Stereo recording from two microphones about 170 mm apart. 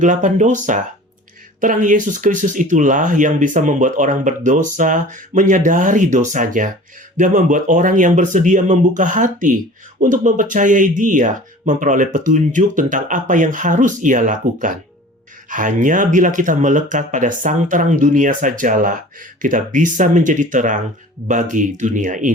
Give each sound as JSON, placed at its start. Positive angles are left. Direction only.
{"t": 0.0, "sound": "speech", "side_deg": -50}